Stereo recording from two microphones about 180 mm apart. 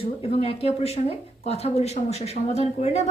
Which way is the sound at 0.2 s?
35° left (ahead or behind).